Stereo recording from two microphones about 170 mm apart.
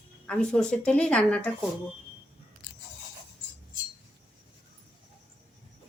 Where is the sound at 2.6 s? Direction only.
55° left (ahead or behind).